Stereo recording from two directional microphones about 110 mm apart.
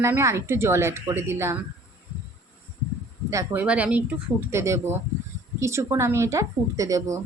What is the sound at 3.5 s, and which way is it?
Speech, 15° right (ahead or behind).